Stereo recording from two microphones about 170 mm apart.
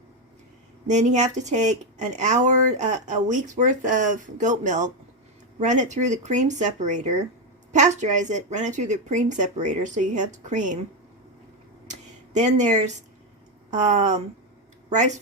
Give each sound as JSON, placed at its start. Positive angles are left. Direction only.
{"t": 0.9, "sound": "speech", "side_deg": -45}
{"t": 11.9, "sound": "a sound", "side_deg": -45}
{"t": 13.7, "sound": "speech", "side_deg": -45}